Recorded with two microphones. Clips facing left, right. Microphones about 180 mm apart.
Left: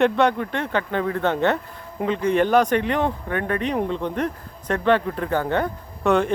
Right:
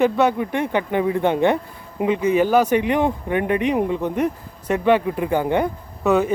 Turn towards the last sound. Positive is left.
turn(degrees=-5)  # may be behind; listen again after turning